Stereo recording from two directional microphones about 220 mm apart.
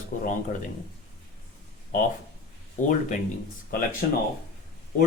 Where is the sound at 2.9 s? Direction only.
35° left (ahead or behind).